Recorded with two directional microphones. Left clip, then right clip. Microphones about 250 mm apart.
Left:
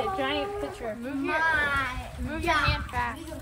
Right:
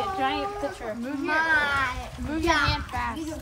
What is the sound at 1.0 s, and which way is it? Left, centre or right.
Speech, right.